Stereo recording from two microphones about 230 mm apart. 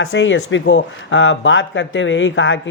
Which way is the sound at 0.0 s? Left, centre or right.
Left.